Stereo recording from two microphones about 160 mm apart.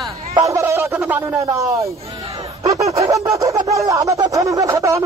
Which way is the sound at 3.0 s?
20° right (ahead or behind).